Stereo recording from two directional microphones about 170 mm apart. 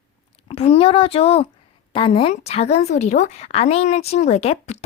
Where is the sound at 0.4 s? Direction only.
35° left (ahead or behind).